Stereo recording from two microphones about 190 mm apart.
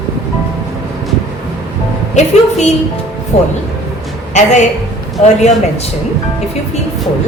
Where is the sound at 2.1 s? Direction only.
35° left (ahead or behind).